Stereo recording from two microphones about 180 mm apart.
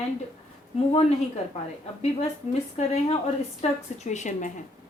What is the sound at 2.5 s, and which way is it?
Speech, 40° left (ahead or behind).